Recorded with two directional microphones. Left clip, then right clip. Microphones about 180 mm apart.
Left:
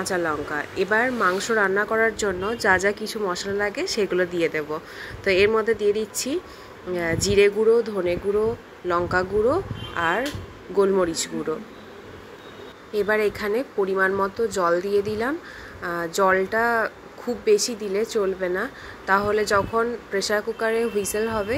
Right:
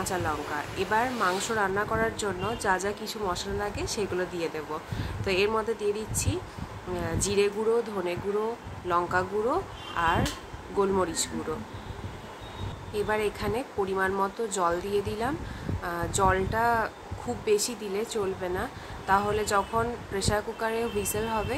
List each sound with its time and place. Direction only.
0.0 s a woman's voice: 25° left (ahead or behind)
12.9 s a woman's voice: 25° left (ahead or behind)